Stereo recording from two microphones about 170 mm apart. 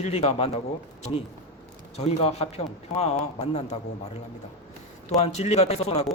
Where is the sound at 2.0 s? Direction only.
40° left (ahead or behind).